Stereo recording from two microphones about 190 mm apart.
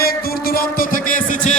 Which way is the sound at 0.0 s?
50° left (ahead or behind).